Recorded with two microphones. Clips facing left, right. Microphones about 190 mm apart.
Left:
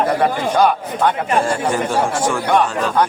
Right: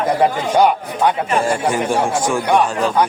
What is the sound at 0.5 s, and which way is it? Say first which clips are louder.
Speech: right 1 dB; 15° right (ahead or behind).